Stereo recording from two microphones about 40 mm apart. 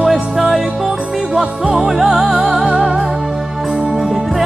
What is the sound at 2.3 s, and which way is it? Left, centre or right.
Music, right.